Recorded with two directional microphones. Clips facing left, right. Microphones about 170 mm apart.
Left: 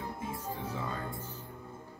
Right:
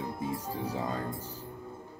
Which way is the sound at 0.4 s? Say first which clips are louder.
Right 4 dB; 35° right (ahead or behind).